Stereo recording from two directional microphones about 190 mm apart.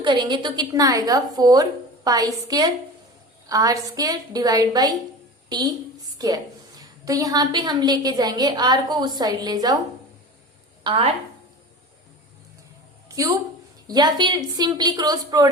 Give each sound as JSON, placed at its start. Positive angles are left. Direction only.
{"t": 0.0, "sound": "a woman's voice", "side_deg": -25}
{"t": 10.8, "sound": "a woman's voice", "side_deg": -30}
{"t": 13.1, "sound": "a woman's voice", "side_deg": -20}